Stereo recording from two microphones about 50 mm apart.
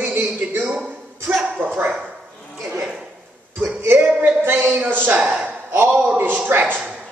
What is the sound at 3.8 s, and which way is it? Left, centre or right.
A man's voice, right.